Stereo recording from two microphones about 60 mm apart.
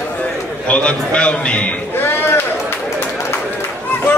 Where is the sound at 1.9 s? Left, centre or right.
Left.